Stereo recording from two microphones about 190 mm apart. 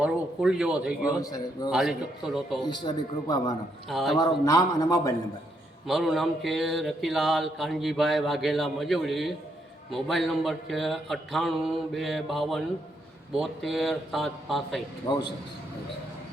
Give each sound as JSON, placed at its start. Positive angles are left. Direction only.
{"t": 0.0, "sound": "speech", "side_deg": -5}
{"t": 1.2, "sound": "speech", "side_deg": 20}
{"t": 1.7, "sound": "mantra", "side_deg": 0}
{"t": 2.6, "sound": "speech", "side_deg": 25}
{"t": 3.8, "sound": "mantra", "side_deg": 0}
{"t": 4.2, "sound": "a man's voice", "side_deg": 15}
{"t": 5.8, "sound": "mantra", "side_deg": 0}